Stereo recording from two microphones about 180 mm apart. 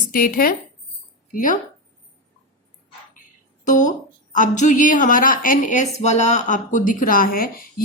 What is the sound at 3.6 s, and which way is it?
A woman's voice, 45° left (ahead or behind).